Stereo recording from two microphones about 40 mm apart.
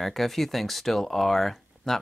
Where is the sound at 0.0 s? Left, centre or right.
Centre.